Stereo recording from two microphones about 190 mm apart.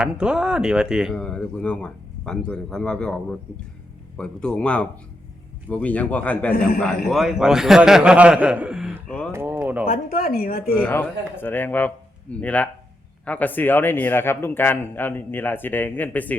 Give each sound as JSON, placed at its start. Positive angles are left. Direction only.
{"t": 0.0, "sound": "a man's voice", "side_deg": -5}
{"t": 9.3, "sound": "a sound", "side_deg": -10}
{"t": 9.8, "sound": "speech", "side_deg": 50}
{"t": 10.8, "sound": "a man's voice", "side_deg": 10}